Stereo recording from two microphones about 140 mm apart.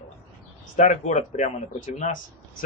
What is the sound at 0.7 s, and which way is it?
Speech, 60° left (ahead or behind).